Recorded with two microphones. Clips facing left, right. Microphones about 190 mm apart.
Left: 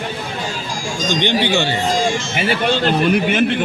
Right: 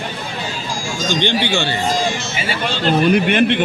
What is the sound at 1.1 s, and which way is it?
Speech, 15° left (ahead or behind).